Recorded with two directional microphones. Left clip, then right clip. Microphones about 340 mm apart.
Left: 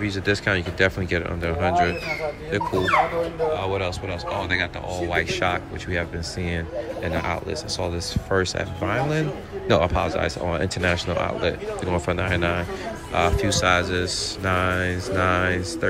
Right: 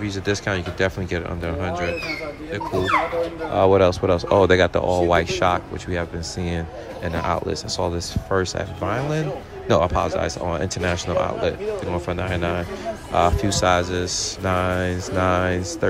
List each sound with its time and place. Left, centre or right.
0.0 s speech: centre
3.5 s speech: centre